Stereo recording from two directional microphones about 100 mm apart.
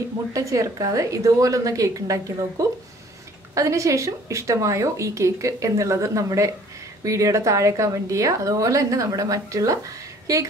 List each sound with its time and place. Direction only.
0.3 s speech: 35° right (ahead or behind)